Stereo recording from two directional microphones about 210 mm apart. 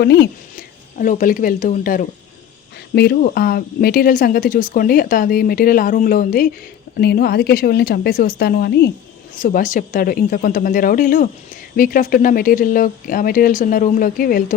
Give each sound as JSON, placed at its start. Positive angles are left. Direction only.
{"t": 0.0, "sound": "speech", "side_deg": 60}
{"t": 0.9, "sound": "speech", "side_deg": 40}